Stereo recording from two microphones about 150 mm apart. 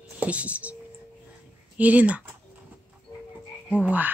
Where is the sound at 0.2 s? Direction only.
10° right (ahead or behind).